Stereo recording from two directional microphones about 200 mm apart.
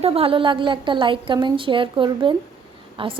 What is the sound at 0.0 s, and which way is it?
A woman's voice, 30° right (ahead or behind).